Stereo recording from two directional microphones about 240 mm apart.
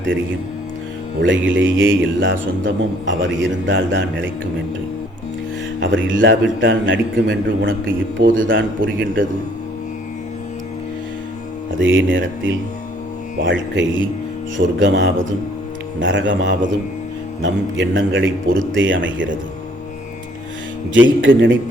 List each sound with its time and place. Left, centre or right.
1.2 s a man's voice: right
5.8 s a man's voice: right
8.2 s speech: right
8.4 s a man's voice: right
11.7 s a man's voice: right
20.9 s a man's voice: right